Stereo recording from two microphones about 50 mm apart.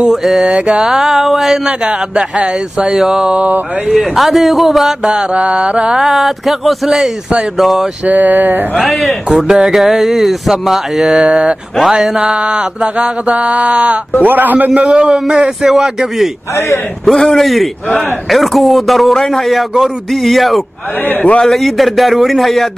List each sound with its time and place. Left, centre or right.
0.0 s speech: centre
1.7 s speech: centre
5.3 s mantra: right
5.9 s speech: centre
8.0 s a sound: right
8.9 s speech: centre
12.2 s mantra: right
14.2 s a sound: right
14.7 s speech: right; by 16.3 s centre
16.5 s a man's voice: left
17.0 s speech: centre